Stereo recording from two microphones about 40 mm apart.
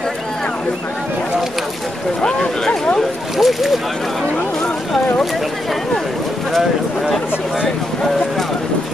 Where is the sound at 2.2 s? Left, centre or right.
Centre.